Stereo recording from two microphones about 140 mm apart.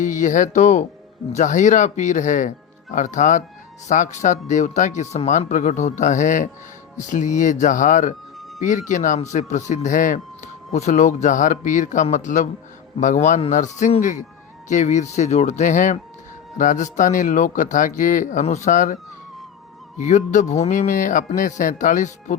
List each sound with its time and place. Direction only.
0.0 s speech: 65° left (ahead or behind)
20.0 s speech: 60° left (ahead or behind)